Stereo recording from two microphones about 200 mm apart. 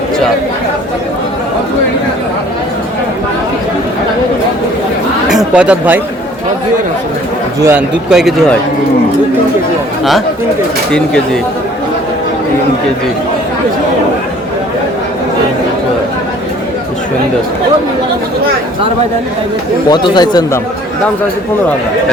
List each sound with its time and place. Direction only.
5.5 s speech: 5° right (ahead or behind)
7.6 s a man's voice: 10° right (ahead or behind)
19.9 s speech: 20° left (ahead or behind)